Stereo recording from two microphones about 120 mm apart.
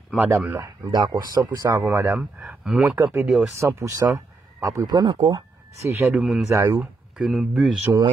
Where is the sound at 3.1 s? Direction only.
5° right (ahead or behind).